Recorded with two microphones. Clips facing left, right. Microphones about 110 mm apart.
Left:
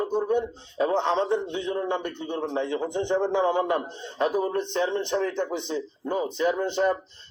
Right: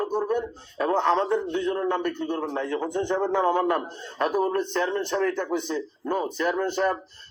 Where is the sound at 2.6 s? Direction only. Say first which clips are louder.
Right 1 dB; 50° right (ahead or behind).